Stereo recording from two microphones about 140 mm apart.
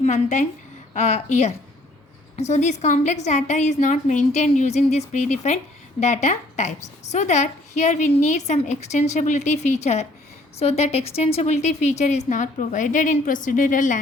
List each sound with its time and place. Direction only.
0.0 s a woman's voice: 60° left (ahead or behind)